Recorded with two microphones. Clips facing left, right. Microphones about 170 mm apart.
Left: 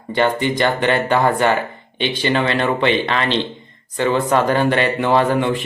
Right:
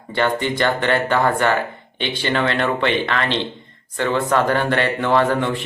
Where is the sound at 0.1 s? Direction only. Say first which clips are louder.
Left 2 dB; 15° left (ahead or behind).